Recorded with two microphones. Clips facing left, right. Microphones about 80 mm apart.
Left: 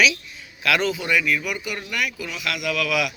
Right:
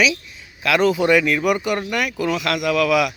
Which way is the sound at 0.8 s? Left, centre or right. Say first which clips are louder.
Right 6 dB; right.